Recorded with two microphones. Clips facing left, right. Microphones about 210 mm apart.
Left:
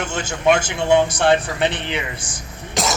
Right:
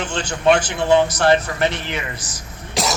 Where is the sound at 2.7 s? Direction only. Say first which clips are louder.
Even; centre (ahead or behind).